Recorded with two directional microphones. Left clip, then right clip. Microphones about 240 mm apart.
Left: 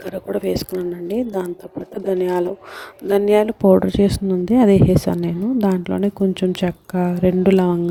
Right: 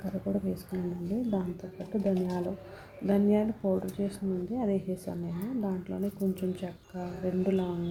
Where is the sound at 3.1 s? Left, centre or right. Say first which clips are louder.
Left 14 dB; left.